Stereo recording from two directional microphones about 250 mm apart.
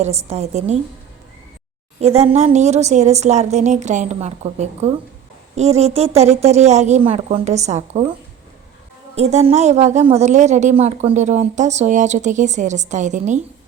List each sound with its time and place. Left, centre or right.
0.0 s a woman's voice: right
2.0 s a woman's voice: right
9.1 s a woman's voice: right